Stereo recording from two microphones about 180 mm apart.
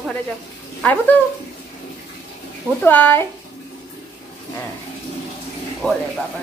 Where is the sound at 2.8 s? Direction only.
10° left (ahead or behind).